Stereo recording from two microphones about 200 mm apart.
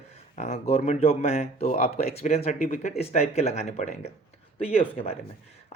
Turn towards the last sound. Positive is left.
turn(degrees=30)  # may be behind; listen again after turning